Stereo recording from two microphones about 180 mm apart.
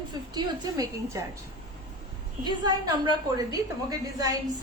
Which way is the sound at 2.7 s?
25° right (ahead or behind).